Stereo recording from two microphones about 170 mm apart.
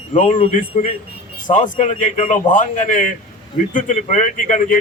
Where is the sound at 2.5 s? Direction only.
50° left (ahead or behind).